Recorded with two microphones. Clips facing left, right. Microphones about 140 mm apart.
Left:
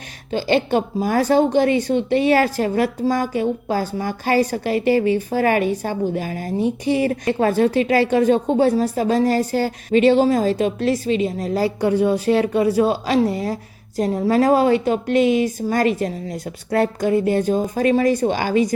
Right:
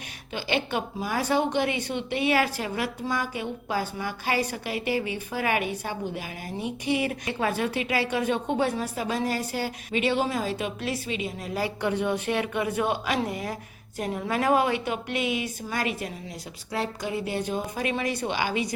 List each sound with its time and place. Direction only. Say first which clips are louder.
0.3 s a woman's voice: left 10 dB; 40° left (ahead or behind)